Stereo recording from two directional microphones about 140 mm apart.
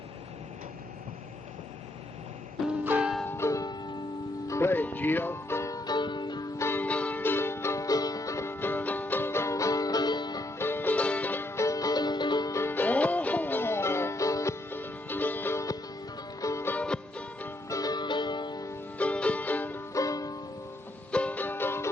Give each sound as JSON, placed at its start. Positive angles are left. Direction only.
{"t": 2.8, "sound": "music", "side_deg": -15}
{"t": 3.2, "sound": "music", "side_deg": 20}
{"t": 6.6, "sound": "music", "side_deg": 15}
{"t": 10.6, "sound": "music", "side_deg": 15}
{"t": 17.7, "sound": "music", "side_deg": 25}
{"t": 18.9, "sound": "music", "side_deg": 10}
{"t": 21.1, "sound": "music", "side_deg": 10}